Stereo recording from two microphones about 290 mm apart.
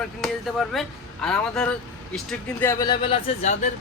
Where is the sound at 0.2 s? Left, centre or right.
Centre; by 3.7 s left.